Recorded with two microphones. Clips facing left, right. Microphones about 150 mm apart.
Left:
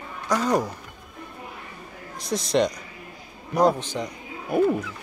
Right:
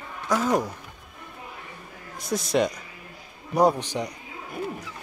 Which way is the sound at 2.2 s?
5° right (ahead or behind).